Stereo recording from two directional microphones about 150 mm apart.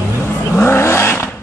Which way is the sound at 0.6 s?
15° left (ahead or behind).